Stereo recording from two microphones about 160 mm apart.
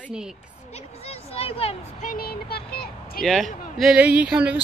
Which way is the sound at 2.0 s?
60° left (ahead or behind).